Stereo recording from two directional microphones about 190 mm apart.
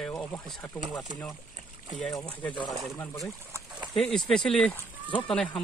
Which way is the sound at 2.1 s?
20° left (ahead or behind).